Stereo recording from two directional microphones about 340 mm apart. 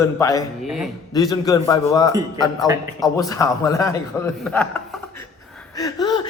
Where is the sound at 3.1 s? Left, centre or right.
Centre.